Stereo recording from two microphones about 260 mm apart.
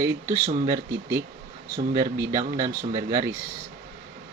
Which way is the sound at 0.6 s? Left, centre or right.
Centre.